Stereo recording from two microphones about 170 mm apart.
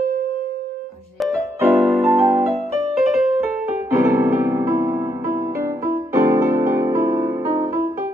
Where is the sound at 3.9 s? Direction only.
15° right (ahead or behind).